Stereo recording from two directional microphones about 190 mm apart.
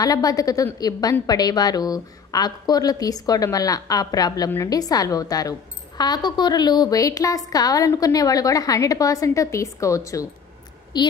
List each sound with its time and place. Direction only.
0.0 s a woman's voice: 20° left (ahead or behind)